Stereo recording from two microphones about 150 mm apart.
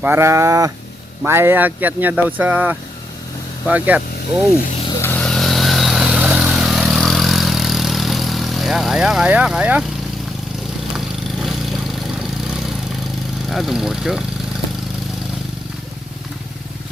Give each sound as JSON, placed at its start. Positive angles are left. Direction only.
{"t": 0.0, "sound": "livestock", "side_deg": -15}
{"t": 1.2, "sound": "speech", "side_deg": -15}
{"t": 4.9, "sound": "vehicle", "side_deg": 15}
{"t": 10.9, "sound": "vehicle", "side_deg": 0}
{"t": 13.5, "sound": "speech", "side_deg": 0}